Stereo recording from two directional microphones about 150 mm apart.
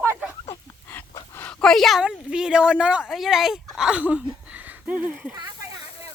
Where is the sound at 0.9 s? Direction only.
10° left (ahead or behind); by 5.3 s 10° right (ahead or behind).